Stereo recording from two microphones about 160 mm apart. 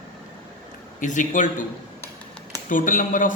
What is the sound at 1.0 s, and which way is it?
Speech, 50° left (ahead or behind).